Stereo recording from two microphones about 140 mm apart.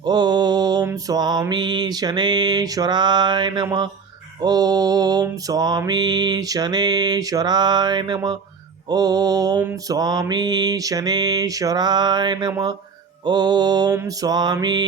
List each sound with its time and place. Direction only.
0.0 s mantra: 30° right (ahead or behind)